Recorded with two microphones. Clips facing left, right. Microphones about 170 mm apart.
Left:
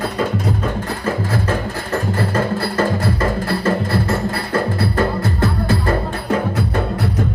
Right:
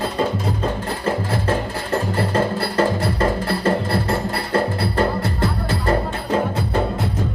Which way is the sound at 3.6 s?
30° right (ahead or behind).